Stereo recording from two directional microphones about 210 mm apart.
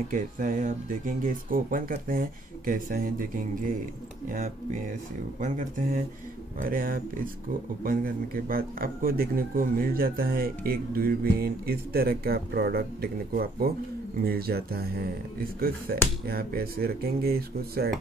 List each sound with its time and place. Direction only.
0.1 s speech: 40° right (ahead or behind)
5.4 s a man's voice: 35° right (ahead or behind)